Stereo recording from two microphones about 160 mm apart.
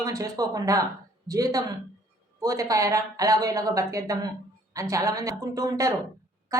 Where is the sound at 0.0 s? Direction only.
20° right (ahead or behind).